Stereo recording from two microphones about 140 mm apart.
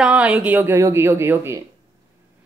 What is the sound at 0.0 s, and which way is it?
A woman's voice, 5° right (ahead or behind).